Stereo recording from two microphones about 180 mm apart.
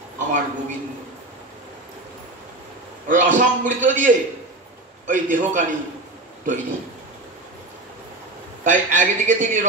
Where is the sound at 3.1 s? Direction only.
45° right (ahead or behind).